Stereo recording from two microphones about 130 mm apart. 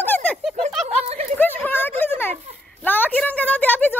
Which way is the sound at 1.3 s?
15° left (ahead or behind).